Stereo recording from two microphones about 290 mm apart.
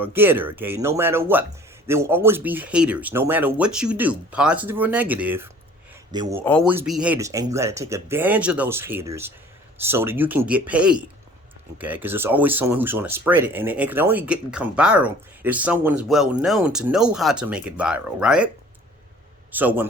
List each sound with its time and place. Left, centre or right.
0.0 s speech: centre
6.4 s a man's voice: centre